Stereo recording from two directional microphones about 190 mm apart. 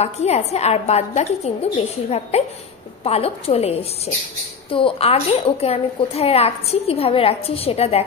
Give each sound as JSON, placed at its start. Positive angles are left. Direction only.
{"t": 0.0, "sound": "a woman's voice", "side_deg": 35}